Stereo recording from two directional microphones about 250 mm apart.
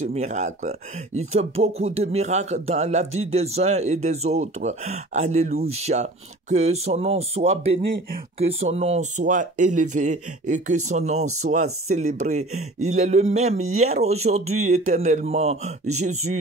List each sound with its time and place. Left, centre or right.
0.0 s speech: right